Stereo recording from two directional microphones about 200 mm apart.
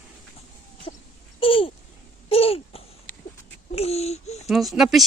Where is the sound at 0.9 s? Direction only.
30° left (ahead or behind).